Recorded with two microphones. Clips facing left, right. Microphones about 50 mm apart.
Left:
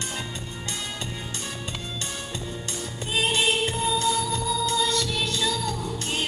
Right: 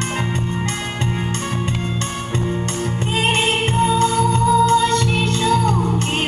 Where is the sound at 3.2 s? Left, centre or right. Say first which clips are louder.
Right 4 dB; right.